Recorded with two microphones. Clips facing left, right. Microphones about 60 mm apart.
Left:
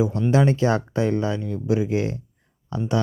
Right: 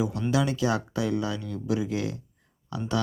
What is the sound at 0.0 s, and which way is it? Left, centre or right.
Speech, left.